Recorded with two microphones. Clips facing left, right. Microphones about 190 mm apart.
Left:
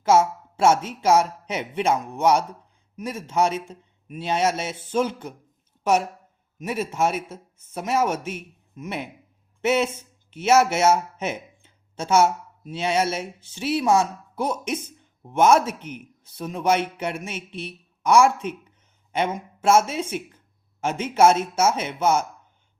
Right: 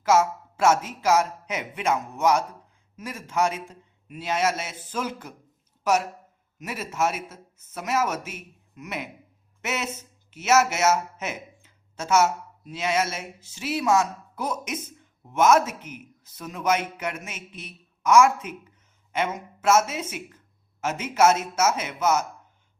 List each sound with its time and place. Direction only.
0.0 s a woman's voice: 30° left (ahead or behind)
6.7 s speech: 30° left (ahead or behind)
9.6 s speech: 30° left (ahead or behind)
15.8 s speech: 5° right (ahead or behind)
16.2 s speech: 30° left (ahead or behind)